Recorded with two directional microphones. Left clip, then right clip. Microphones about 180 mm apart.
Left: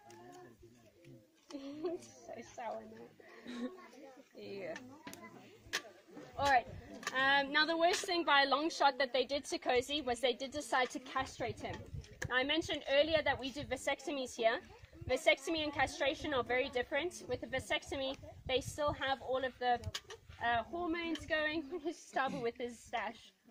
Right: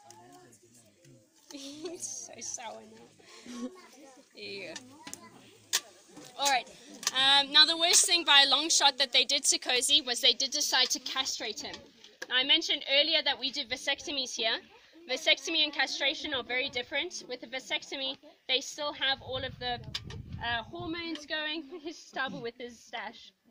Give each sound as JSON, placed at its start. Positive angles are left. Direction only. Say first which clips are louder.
{"t": 1.5, "sound": "a sound", "louder": "right 1 dB", "side_deg": 25}
{"t": 2.3, "sound": "a woman's voice", "louder": "right 2 dB", "side_deg": 25}
{"t": 4.4, "sound": "a woman's voice", "louder": "right 4 dB", "side_deg": 25}
{"t": 6.3, "sound": "a woman's voice", "louder": "right 2 dB", "side_deg": 25}